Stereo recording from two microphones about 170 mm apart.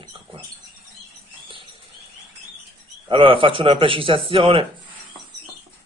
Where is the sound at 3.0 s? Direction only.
30° right (ahead or behind).